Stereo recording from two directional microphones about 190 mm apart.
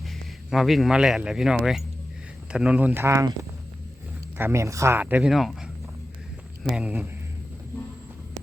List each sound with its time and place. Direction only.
0.0 s speech: centre (ahead or behind)
4.4 s speech: 15° right (ahead or behind)
6.7 s speech: 5° right (ahead or behind)